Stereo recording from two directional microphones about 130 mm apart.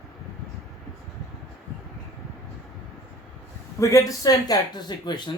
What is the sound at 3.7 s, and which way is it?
Speech, 25° left (ahead or behind).